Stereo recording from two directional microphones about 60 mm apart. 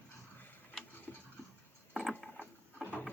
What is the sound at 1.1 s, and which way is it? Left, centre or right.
Tick-tock, left.